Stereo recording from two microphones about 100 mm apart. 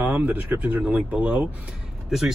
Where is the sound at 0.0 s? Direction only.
20° right (ahead or behind).